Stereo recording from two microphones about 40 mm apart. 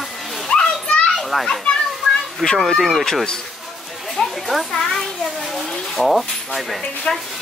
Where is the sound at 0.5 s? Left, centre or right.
Left.